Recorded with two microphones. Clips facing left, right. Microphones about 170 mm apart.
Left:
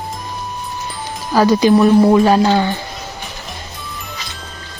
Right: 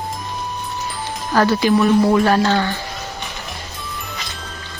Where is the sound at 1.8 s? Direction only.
20° left (ahead or behind).